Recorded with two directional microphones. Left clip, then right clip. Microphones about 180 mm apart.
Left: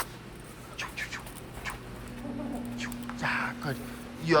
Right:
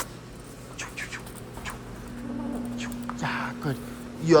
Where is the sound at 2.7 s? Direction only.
15° right (ahead or behind).